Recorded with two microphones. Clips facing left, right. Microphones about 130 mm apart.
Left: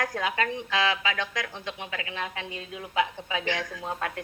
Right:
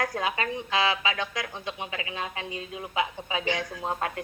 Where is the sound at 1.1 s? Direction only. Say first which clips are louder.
Even; 15° right (ahead or behind).